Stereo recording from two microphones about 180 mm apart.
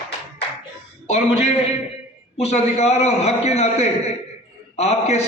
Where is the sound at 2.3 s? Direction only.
35° left (ahead or behind).